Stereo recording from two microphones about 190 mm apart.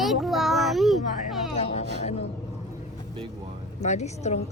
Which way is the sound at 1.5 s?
30° left (ahead or behind).